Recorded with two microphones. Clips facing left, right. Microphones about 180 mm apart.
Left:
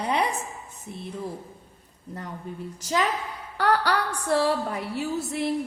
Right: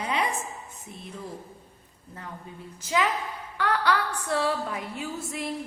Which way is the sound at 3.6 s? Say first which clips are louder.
Left 2 dB; 40° left (ahead or behind).